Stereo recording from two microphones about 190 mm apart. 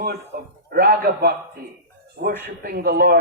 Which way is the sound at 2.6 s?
55° right (ahead or behind).